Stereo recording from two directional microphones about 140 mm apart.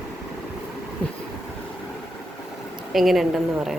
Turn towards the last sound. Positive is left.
turn(degrees=-5)  # may be behind; listen again after turning